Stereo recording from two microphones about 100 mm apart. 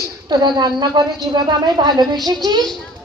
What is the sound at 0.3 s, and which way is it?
Speech, 45° right (ahead or behind).